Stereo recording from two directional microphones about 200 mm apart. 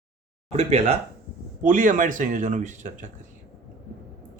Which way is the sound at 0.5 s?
35° right (ahead or behind).